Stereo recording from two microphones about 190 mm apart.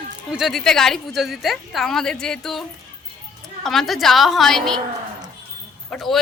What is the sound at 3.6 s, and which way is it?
A woman's voice, centre (ahead or behind).